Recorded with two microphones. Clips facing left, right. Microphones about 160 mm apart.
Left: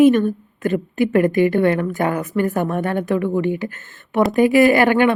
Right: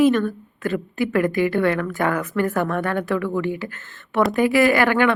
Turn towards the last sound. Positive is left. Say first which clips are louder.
# left 3 dB
turn(degrees=20)  # may be behind; listen again after turning